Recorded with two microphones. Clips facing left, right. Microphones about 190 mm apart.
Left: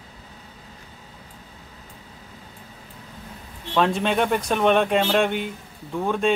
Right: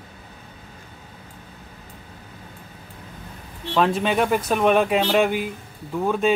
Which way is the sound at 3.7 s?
Centre (ahead or behind).